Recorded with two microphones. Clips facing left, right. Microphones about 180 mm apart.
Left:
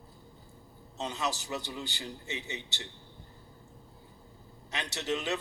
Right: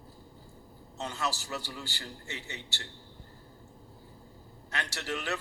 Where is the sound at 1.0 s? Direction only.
15° left (ahead or behind).